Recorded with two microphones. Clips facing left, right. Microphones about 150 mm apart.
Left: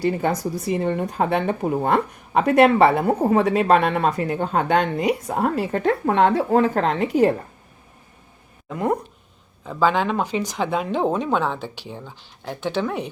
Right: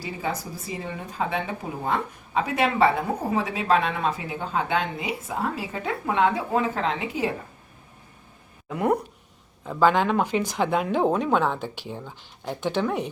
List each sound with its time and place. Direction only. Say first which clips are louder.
0.0 s speech: left 9 dB; 65° left (ahead or behind)
8.7 s speech: even; 10° right (ahead or behind)
10.3 s speech: even; 15° left (ahead or behind)
10.6 s speech: even; 10° right (ahead or behind)